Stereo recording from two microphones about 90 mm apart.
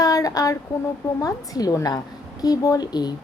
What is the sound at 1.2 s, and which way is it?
Speech, 40° left (ahead or behind).